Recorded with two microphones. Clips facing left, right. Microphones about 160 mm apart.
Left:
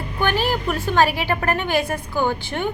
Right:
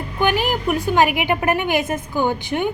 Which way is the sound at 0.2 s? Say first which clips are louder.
Right 2 dB; 15° right (ahead or behind).